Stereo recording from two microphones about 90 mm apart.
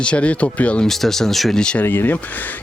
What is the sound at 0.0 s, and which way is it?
Speech, 15° left (ahead or behind).